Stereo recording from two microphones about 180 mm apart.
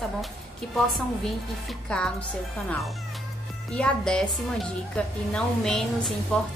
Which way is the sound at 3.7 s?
5° left (ahead or behind).